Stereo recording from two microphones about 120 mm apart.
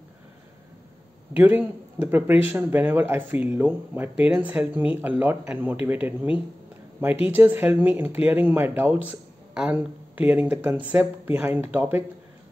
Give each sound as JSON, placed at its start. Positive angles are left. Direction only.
{"t": 1.3, "sound": "speech", "side_deg": -15}